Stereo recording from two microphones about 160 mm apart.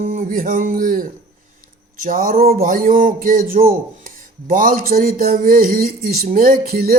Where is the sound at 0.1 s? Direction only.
60° right (ahead or behind).